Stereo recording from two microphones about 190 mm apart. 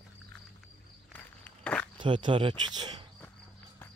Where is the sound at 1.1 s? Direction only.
5° left (ahead or behind).